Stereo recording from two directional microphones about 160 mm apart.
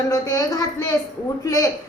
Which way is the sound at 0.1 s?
25° left (ahead or behind).